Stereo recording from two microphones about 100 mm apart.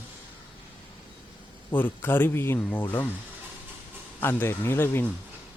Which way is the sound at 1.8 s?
20° left (ahead or behind).